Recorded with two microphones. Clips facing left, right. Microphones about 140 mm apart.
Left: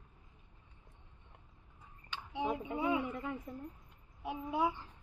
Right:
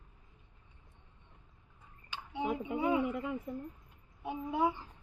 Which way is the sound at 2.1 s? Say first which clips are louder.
Right 1 dB; centre (ahead or behind).